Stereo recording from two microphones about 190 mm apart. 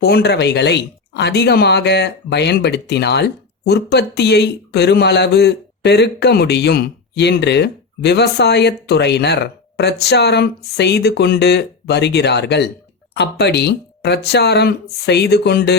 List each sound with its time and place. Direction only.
0.0 s speech: 60° left (ahead or behind)